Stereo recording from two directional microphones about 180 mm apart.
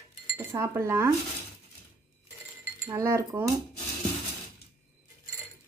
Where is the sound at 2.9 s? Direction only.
15° right (ahead or behind).